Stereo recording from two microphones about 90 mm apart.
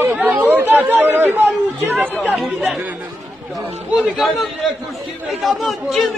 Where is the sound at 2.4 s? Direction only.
Centre (ahead or behind).